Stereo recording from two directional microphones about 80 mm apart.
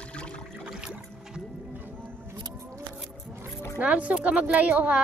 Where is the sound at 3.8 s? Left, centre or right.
Centre.